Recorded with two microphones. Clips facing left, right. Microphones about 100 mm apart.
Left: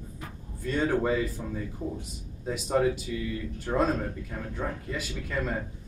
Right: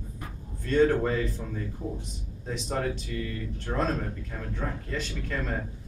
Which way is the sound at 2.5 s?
5° left (ahead or behind).